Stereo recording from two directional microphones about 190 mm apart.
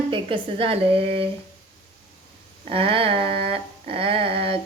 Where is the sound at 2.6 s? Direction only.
30° right (ahead or behind).